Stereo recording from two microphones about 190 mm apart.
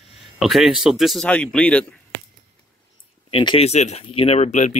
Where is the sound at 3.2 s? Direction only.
30° left (ahead or behind).